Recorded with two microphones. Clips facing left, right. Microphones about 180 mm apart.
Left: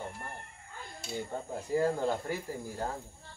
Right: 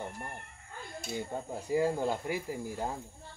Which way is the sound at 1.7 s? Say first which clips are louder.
Even; 10° right (ahead or behind).